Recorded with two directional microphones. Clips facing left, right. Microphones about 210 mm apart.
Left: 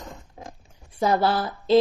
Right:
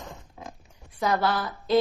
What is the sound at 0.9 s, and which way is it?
Speech, 30° left (ahead or behind).